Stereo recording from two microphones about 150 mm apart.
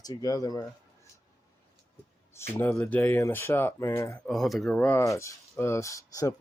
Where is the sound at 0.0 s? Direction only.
25° left (ahead or behind).